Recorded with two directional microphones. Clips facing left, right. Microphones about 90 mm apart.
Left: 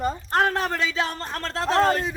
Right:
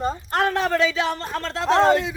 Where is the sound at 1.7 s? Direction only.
25° right (ahead or behind).